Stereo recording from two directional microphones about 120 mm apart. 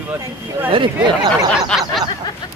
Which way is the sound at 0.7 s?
45° right (ahead or behind).